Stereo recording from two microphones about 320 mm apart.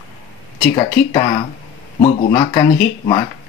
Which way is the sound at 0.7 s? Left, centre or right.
Centre.